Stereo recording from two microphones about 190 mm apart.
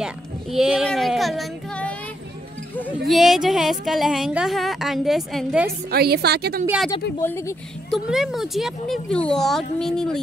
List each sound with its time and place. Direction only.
0.0 s a child's voice: 5° right (ahead or behind)
3.1 s speech: centre (ahead or behind)
5.7 s a woman's voice: 55° right (ahead or behind)
7.2 s speech: 15° left (ahead or behind)
7.9 s speech: centre (ahead or behind)